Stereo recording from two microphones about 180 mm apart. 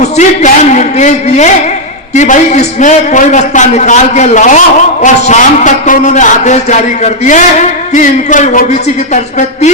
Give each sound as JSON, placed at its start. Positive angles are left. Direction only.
{"t": 0.0, "sound": "a man's voice", "side_deg": 40}